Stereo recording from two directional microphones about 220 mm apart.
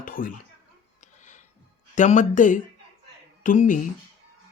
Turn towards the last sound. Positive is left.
turn(degrees=35)  # may be behind; listen again after turning